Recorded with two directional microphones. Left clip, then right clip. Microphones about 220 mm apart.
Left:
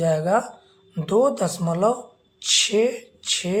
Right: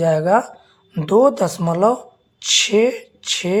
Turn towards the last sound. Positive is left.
turn(degrees=-30)  # may be behind; listen again after turning